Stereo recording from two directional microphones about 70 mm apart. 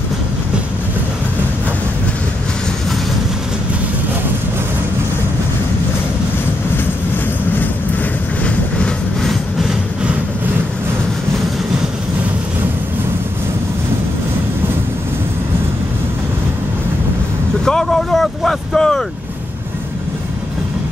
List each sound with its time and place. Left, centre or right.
8.5 s vehicle: centre
9.3 s train: centre
17.6 s vehicle: centre